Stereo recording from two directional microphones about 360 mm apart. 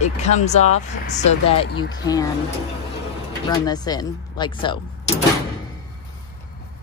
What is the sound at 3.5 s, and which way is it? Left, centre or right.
Speech, centre.